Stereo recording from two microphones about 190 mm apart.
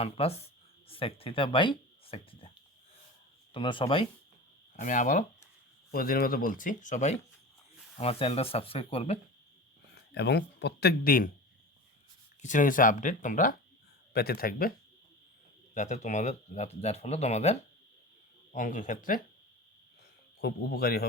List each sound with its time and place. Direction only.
0.0 s speech: 30° left (ahead or behind)
3.5 s speech: 25° left (ahead or behind)
4.8 s speech: 40° left (ahead or behind)
9.9 s speech: 65° left (ahead or behind)
12.4 s speech: 40° left (ahead or behind)
14.1 s speech: 55° left (ahead or behind)
15.7 s speech: 40° left (ahead or behind)
20.4 s speech: 55° left (ahead or behind)